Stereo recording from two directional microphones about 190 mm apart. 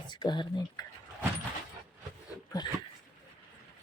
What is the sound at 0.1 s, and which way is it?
Speech, 25° left (ahead or behind).